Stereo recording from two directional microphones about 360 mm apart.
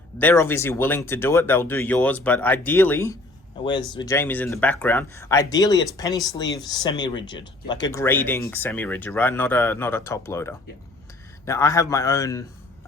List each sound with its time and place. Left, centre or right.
0.2 s speech: centre